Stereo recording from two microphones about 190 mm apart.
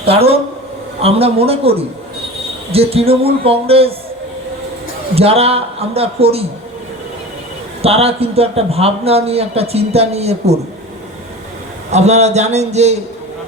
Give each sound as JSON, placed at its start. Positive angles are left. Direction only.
{"t": 0.0, "sound": "a man's voice", "side_deg": -30}
{"t": 5.1, "sound": "a man's voice", "side_deg": -30}
{"t": 7.8, "sound": "a man's voice", "side_deg": -30}
{"t": 11.9, "sound": "a man's voice", "side_deg": -35}